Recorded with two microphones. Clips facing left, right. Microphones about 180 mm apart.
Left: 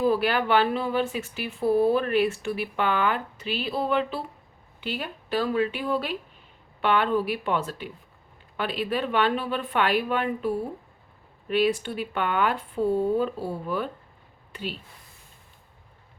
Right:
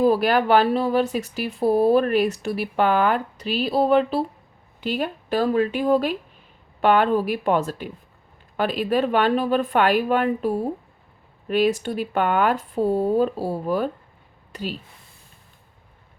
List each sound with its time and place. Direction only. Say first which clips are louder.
0.0 s speech: right 5 dB; 40° right (ahead or behind)